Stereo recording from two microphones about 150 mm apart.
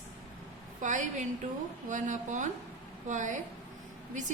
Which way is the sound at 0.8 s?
55° right (ahead or behind).